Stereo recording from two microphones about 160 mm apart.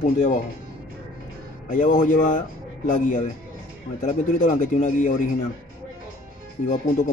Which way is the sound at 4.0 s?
50° left (ahead or behind).